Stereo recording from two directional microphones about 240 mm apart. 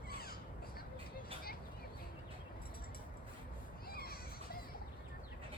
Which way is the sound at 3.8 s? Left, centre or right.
Left.